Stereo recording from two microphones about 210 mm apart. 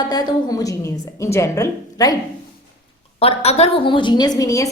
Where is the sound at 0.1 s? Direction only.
20° left (ahead or behind).